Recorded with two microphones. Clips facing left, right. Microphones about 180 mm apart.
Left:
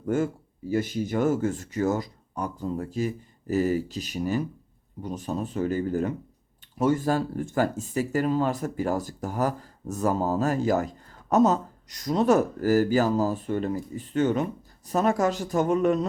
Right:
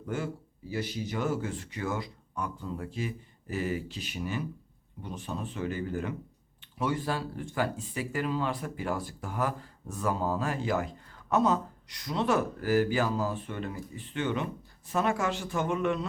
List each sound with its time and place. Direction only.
0.0 s a man's voice: 45° left (ahead or behind)